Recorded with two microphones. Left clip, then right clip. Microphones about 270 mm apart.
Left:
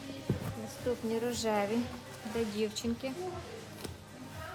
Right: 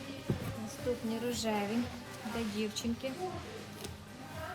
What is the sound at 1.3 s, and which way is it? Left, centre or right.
A woman's voice, centre.